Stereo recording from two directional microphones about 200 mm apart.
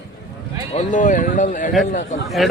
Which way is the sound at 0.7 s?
40° left (ahead or behind).